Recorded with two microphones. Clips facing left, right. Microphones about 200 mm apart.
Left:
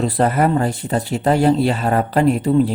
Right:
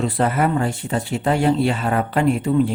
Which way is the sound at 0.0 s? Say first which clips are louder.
Left 3 dB; 40° left (ahead or behind).